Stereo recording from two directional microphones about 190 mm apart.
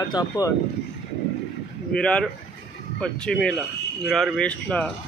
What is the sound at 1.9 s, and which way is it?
Speech, 5° left (ahead or behind).